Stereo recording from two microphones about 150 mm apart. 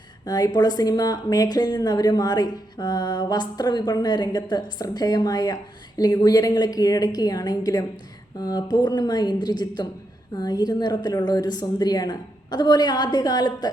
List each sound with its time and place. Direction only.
0.3 s speech: 25° left (ahead or behind)